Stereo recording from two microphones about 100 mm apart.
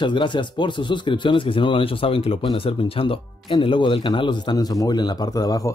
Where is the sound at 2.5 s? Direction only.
70° left (ahead or behind).